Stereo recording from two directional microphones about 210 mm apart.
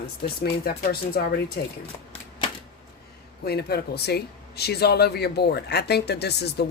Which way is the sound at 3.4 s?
50° left (ahead or behind).